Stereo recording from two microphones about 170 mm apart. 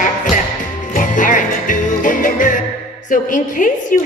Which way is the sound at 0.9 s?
50° left (ahead or behind).